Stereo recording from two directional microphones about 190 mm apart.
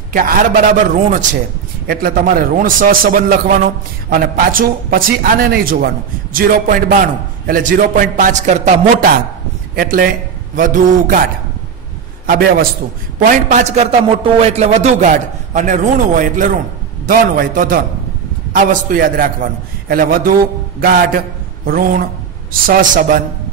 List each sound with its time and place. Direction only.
0.1 s a man's voice: 50° right (ahead or behind)
12.3 s a man's voice: 50° right (ahead or behind)